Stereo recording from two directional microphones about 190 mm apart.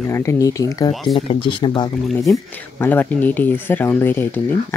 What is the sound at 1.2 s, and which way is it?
Speech, 25° left (ahead or behind).